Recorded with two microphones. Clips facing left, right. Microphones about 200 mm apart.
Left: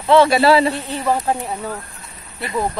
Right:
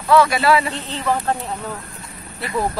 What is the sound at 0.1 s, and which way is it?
Speech, 30° left (ahead or behind).